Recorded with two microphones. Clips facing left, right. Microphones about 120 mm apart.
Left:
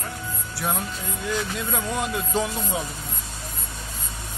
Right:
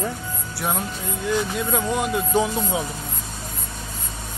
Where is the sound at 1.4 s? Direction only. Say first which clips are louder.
Right 4 dB; 15° right (ahead or behind).